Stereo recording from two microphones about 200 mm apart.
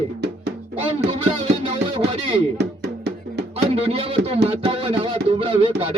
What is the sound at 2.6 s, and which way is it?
Music, 55° right (ahead or behind).